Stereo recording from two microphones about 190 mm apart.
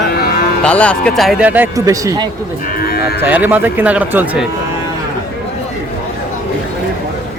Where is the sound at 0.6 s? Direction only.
5° left (ahead or behind); by 2.2 s 20° right (ahead or behind).